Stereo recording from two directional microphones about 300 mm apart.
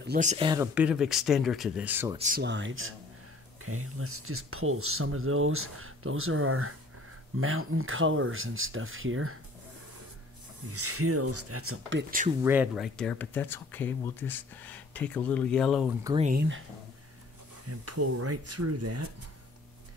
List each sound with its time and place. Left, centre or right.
0.0 s speech: right; by 2.1 s centre
2.1 s speech: right
10.7 s speech: right
12.3 s speech: centre
16.0 s speech: centre
16.3 s speech: right
17.6 s speech: right